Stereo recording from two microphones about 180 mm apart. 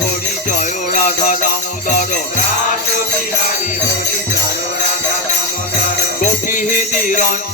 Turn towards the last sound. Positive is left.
turn(degrees=50)  # may be behind; listen again after turning